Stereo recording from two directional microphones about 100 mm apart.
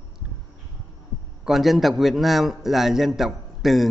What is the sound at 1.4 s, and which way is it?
A man's voice, centre (ahead or behind).